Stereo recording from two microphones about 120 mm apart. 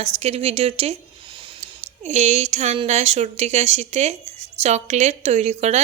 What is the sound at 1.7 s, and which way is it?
Speech, 70° right (ahead or behind).